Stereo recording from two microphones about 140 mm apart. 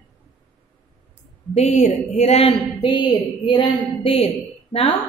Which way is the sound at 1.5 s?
55° left (ahead or behind).